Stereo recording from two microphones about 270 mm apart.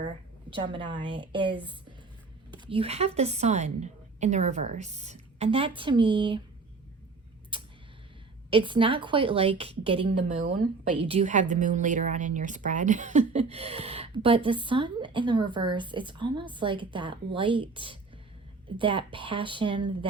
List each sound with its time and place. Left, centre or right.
0.5 s a woman's voice: centre
7.5 s a sound: centre
8.4 s speech: centre